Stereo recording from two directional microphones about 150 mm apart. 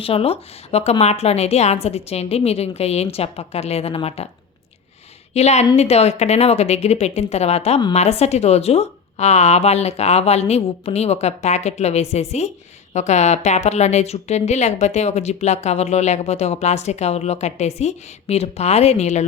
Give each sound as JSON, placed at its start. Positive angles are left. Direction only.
{"t": 0.0, "sound": "a woman's voice", "side_deg": 40}
{"t": 5.3, "sound": "a woman's voice", "side_deg": 45}